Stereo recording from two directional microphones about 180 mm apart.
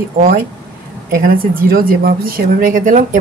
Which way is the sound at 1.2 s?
55° right (ahead or behind).